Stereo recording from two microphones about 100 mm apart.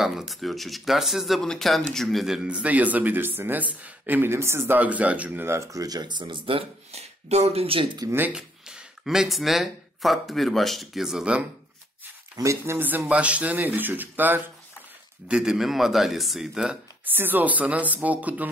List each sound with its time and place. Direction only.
0.0 s speech: centre (ahead or behind); by 8.0 s 65° right (ahead or behind)
8.3 s speech: 10° right (ahead or behind)
12.4 s a man's voice: 25° right (ahead or behind)
15.2 s a man's voice: 5° right (ahead or behind)
17.0 s speech: 20° right (ahead or behind)